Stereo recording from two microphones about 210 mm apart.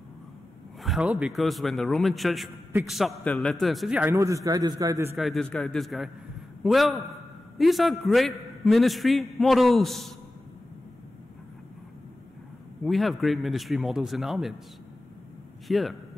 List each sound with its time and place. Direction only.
0.8 s a man's voice: 5° right (ahead or behind)
4.1 s a man's voice: 15° right (ahead or behind)
5.1 s a man's voice: centre (ahead or behind)
12.8 s a man's voice: centre (ahead or behind)
15.7 s a man's voice: centre (ahead or behind)